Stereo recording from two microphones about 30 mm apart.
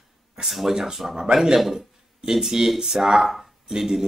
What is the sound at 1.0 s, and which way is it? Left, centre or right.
Speech, centre.